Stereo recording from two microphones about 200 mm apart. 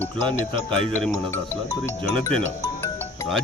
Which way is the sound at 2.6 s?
15° left (ahead or behind).